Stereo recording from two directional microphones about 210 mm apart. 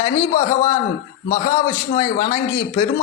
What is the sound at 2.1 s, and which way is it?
Speech, 15° left (ahead or behind).